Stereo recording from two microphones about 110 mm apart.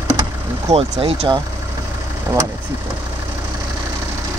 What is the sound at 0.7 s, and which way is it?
Speech, 60° right (ahead or behind).